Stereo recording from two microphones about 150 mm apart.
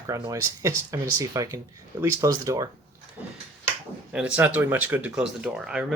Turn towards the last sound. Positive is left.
turn(degrees=-5)  # may be behind; listen again after turning